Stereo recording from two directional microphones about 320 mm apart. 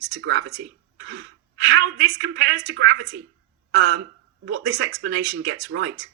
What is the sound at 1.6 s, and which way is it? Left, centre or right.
Speech, right.